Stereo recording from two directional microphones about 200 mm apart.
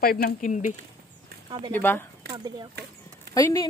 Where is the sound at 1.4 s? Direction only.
25° right (ahead or behind).